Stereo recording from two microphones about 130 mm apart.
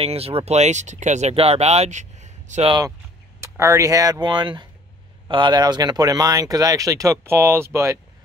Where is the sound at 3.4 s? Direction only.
20° right (ahead or behind).